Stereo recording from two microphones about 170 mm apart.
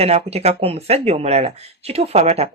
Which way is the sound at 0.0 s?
35° right (ahead or behind).